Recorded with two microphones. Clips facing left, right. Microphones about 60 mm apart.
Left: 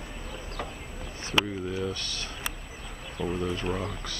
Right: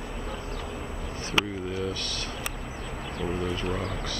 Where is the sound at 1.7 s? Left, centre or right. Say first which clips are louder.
Right 1 dB; left.